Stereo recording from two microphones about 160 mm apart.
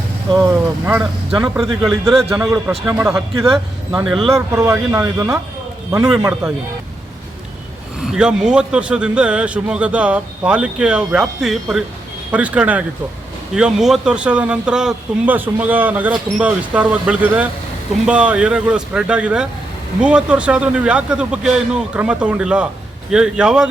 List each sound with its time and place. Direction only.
0.3 s speech: 15° right (ahead or behind)
1.3 s speech: 5° right (ahead or behind)
2.3 s speech: 15° right (ahead or behind)
3.4 s speech: centre (ahead or behind)
4.4 s speech: 20° right (ahead or behind)
6.4 s speech: 5° right (ahead or behind)
7.9 s speech: 5° right (ahead or behind)